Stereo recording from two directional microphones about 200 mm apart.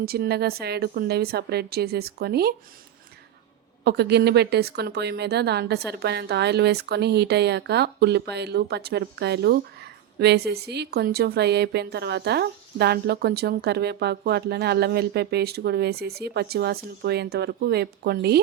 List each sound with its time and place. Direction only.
0.0 s a woman's voice: 50° right (ahead or behind)
3.8 s a woman's voice: 55° right (ahead or behind)